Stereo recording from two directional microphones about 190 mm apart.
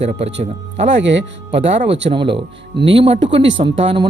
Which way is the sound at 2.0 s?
25° right (ahead or behind).